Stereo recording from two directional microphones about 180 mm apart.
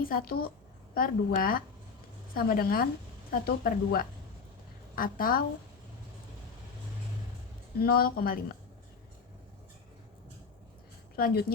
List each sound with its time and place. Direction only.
0.0 s a woman's voice: 55° left (ahead or behind)
7.8 s a woman's voice: 55° left (ahead or behind)
11.2 s a woman's voice: 55° left (ahead or behind)